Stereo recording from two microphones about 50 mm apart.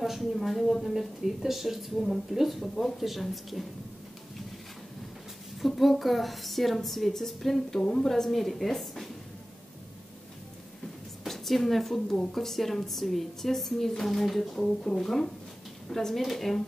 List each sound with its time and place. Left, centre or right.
0.0 s a woman's voice: centre
5.8 s a woman's voice: centre
11.2 s a woman's voice: centre
14.6 s a woman's voice: centre